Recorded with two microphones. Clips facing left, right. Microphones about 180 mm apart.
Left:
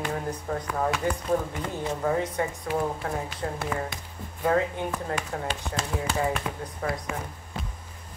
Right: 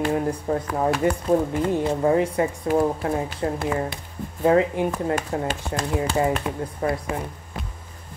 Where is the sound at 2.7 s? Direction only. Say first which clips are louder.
Right 8 dB; 45° right (ahead or behind).